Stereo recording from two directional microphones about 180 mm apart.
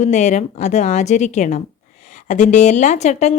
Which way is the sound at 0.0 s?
40° left (ahead or behind).